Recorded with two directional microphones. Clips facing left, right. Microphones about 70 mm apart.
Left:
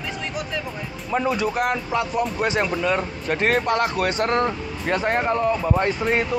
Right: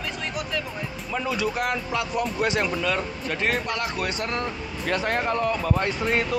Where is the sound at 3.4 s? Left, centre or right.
Left.